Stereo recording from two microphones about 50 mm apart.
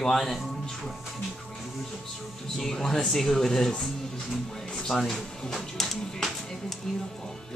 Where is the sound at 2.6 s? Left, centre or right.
Centre.